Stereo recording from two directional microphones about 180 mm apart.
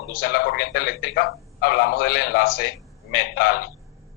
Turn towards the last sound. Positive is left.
turn(degrees=55)  # may be behind; listen again after turning